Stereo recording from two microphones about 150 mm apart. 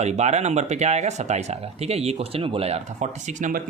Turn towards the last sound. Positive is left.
turn(degrees=-55)  # may be behind; listen again after turning